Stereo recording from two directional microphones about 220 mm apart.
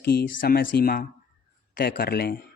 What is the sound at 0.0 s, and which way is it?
A man's voice, 45° left (ahead or behind).